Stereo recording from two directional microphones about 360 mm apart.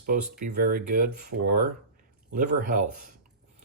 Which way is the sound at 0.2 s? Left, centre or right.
Right.